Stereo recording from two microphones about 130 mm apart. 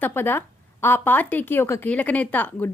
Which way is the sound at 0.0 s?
15° left (ahead or behind).